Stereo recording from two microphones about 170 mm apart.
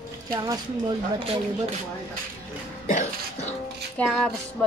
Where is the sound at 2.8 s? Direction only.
40° left (ahead or behind).